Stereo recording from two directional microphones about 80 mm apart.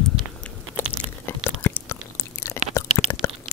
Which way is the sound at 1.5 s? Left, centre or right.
Left.